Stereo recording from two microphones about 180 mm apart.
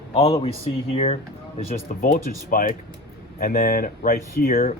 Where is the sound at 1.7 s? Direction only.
55° left (ahead or behind).